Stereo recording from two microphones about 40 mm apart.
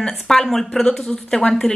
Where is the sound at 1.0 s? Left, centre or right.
Left.